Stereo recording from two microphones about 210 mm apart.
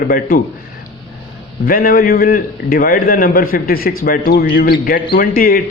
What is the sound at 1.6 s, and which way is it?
A man's voice, 45° left (ahead or behind).